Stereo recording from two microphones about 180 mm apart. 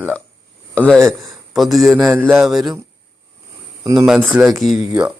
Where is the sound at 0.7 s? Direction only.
5° left (ahead or behind).